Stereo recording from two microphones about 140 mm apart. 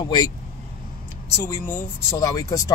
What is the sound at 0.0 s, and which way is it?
Speech, 30° left (ahead or behind).